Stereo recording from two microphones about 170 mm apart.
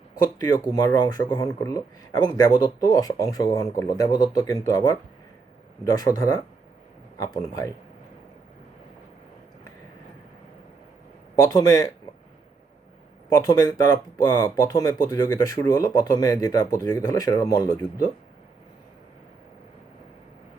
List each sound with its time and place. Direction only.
0.2 s speech: 25° left (ahead or behind)
11.4 s speech: 20° left (ahead or behind)
13.4 s speech: 20° left (ahead or behind)